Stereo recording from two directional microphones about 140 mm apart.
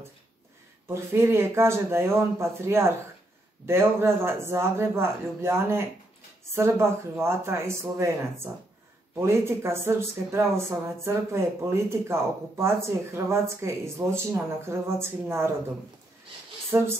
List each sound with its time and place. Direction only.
0.8 s a man's voice: 20° right (ahead or behind)
16.7 s speech: 20° right (ahead or behind)